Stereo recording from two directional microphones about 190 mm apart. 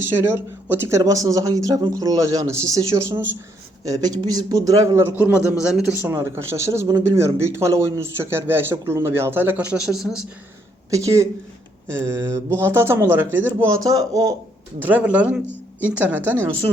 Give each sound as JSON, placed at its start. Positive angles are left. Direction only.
{"t": 0.0, "sound": "speech", "side_deg": -10}
{"t": 10.9, "sound": "speech", "side_deg": -15}